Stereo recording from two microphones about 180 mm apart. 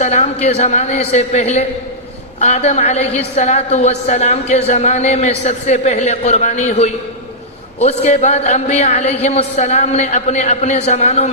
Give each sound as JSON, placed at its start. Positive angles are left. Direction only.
{"t": 0.0, "sound": "a man's voice", "side_deg": 40}